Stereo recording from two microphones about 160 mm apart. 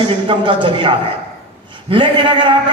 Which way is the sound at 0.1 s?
30° right (ahead or behind).